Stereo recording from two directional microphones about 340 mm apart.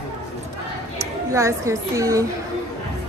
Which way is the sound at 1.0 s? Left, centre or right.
Centre.